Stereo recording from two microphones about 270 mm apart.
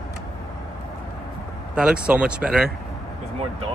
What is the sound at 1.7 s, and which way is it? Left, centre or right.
Speech, centre.